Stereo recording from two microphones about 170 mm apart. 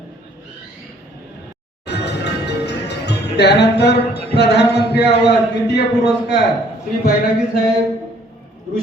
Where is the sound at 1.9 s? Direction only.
80° left.